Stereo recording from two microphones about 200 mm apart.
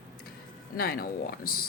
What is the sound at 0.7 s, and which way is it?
Speech, 50° left (ahead or behind).